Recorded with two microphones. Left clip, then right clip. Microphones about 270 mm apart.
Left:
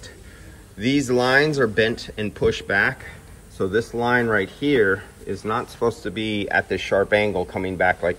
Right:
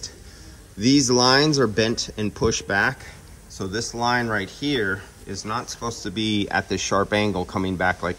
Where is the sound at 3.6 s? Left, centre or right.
Centre.